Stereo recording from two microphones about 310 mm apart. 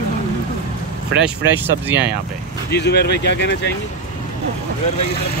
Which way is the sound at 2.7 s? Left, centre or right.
Left.